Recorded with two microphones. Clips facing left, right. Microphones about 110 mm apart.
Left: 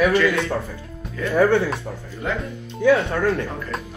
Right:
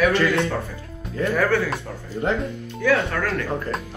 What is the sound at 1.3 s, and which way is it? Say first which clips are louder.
Speech: left 5 dB; 25° left (ahead or behind).